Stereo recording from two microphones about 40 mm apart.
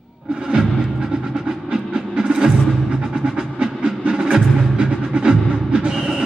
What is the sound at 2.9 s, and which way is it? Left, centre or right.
Music, centre.